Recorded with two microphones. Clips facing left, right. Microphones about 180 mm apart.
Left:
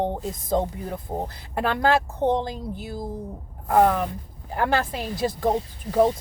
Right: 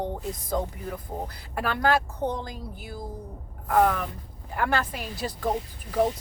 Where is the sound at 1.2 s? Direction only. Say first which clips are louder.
Left 4 dB; 25° left (ahead or behind).